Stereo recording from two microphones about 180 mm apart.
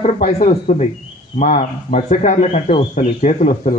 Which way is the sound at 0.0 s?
40° left (ahead or behind).